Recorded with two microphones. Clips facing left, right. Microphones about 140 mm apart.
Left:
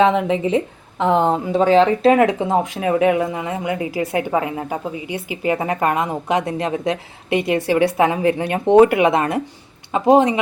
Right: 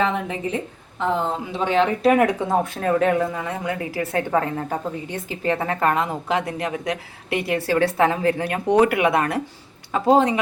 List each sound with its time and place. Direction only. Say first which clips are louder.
0.0 s a woman's voice: left 7 dB; 90° left; by 1.4 s 70° left (ahead or behind)
1.5 s speech: left 6 dB; 35° left (ahead or behind)
2.7 s a woman's voice: left 3 dB; 10° left (ahead or behind)